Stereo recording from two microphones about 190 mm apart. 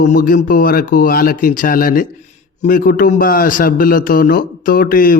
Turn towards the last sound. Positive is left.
turn(degrees=50)  # may be behind; listen again after turning